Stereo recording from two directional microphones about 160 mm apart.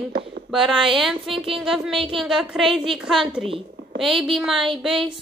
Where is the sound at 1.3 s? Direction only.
35° right (ahead or behind).